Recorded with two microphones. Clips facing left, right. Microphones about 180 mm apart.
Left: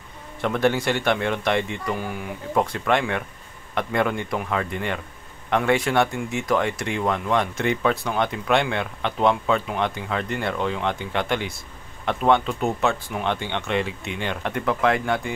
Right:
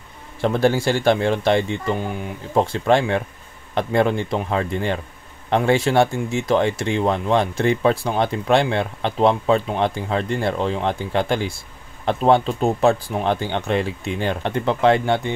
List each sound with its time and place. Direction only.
0.4 s speech: 30° right (ahead or behind)